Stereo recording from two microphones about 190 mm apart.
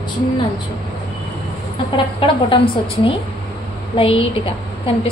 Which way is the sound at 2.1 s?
25° left (ahead or behind).